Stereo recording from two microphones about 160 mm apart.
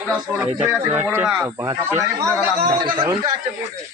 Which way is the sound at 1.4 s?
20° right (ahead or behind).